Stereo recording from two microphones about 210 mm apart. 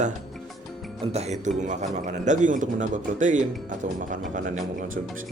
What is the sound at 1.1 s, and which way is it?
A man's voice, 30° right (ahead or behind).